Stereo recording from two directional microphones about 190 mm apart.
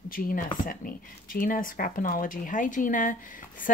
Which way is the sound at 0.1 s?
50° left (ahead or behind).